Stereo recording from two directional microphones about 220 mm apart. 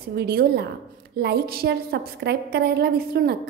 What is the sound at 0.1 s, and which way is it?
A woman's voice, 45° right (ahead or behind).